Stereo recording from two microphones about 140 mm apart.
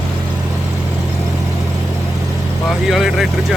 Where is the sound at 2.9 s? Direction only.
5° right (ahead or behind).